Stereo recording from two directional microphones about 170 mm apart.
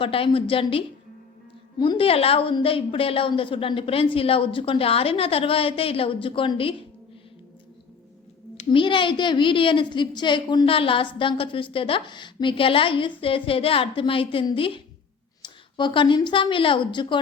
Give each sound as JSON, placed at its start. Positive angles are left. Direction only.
{"t": 0.0, "sound": "a woman's voice", "side_deg": 30}
{"t": 8.5, "sound": "a woman's voice", "side_deg": 30}